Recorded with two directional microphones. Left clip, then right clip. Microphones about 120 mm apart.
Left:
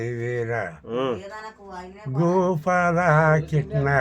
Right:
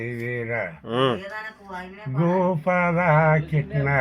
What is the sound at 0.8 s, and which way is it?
Speech, 70° right (ahead or behind).